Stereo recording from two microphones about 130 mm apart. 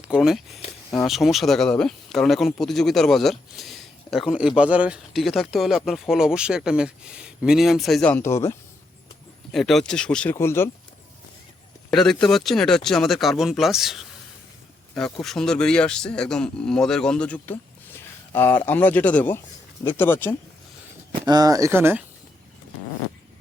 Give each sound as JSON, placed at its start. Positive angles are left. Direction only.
{"t": 0.0, "sound": "speech", "side_deg": -5}
{"t": 8.1, "sound": "speech", "side_deg": 20}
{"t": 9.5, "sound": "speech", "side_deg": 0}
{"t": 10.3, "sound": "speech", "side_deg": 20}
{"t": 11.9, "sound": "speech", "side_deg": 5}
{"t": 21.1, "sound": "speech", "side_deg": -30}